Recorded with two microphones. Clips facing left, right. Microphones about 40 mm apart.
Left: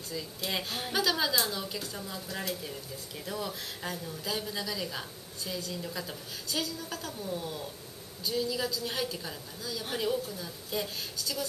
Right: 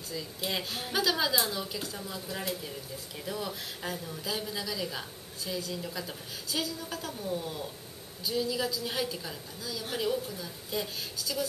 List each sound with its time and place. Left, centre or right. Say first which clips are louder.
0.1 s a woman's voice: even; centre
3.3 s a woman's voice: even; centre